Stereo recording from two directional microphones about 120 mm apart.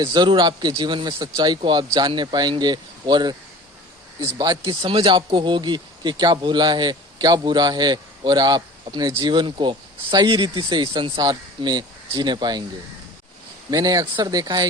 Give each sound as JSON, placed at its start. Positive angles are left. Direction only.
{"t": 0.0, "sound": "speech", "side_deg": -35}
{"t": 4.6, "sound": "speech", "side_deg": -45}
{"t": 13.7, "sound": "speech", "side_deg": -30}